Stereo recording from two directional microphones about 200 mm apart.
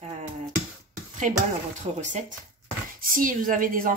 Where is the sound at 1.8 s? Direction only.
35° right (ahead or behind).